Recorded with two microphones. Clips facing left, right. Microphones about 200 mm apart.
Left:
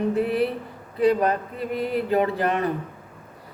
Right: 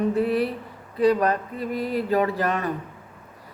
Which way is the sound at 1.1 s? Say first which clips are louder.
Even; 25° left (ahead or behind).